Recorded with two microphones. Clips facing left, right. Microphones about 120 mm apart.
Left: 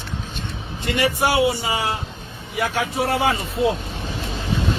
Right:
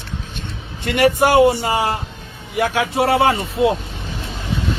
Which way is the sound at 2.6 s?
70° right (ahead or behind).